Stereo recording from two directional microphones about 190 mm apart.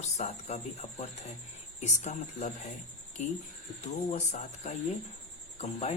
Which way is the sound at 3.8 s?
35° left (ahead or behind).